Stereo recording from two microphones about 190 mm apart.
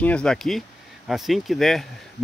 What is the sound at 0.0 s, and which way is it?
Speech, 5° left (ahead or behind).